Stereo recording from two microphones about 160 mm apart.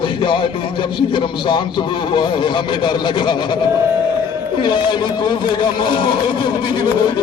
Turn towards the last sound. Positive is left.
turn(degrees=30)  # may be behind; listen again after turning